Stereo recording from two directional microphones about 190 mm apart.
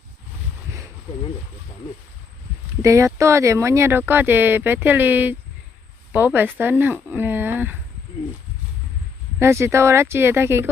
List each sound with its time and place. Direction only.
2.8 s speech: 15° right (ahead or behind)
9.4 s speech: 15° right (ahead or behind)